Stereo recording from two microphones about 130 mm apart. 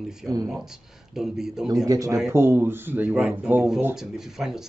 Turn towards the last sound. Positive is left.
turn(degrees=-5)  # may be behind; listen again after turning